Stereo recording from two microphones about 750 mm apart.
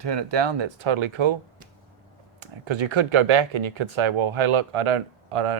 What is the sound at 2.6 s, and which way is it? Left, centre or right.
Speech, right.